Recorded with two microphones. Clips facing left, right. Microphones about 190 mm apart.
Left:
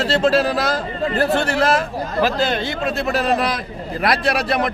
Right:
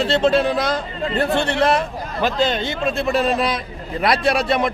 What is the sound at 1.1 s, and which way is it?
Speech, 25° right (ahead or behind).